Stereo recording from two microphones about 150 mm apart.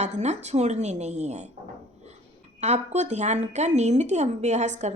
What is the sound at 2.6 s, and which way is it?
A woman's voice, 50° right (ahead or behind).